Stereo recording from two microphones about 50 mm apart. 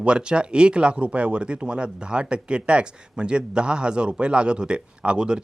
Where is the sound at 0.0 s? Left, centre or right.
Centre.